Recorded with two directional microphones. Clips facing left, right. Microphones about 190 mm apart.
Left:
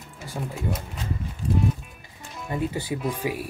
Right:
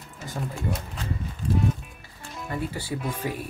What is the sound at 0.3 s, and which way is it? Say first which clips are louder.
Speech: even; 10° left (ahead or behind).